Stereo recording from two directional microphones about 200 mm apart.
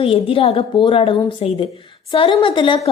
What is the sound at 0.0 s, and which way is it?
Speech, 30° left (ahead or behind).